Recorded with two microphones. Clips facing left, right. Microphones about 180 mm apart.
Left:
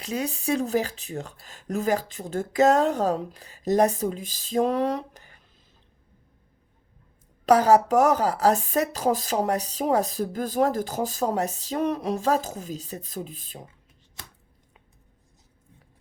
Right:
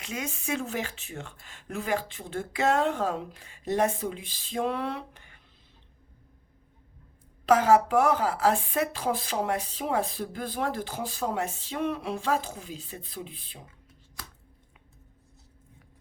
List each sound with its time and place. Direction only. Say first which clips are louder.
0.0 s speech: left 6 dB; 35° left (ahead or behind)
7.4 s speech: left 3 dB; 40° left (ahead or behind)